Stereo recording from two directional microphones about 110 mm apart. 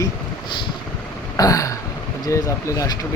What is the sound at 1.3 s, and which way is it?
Throat clearing, 30° left (ahead or behind).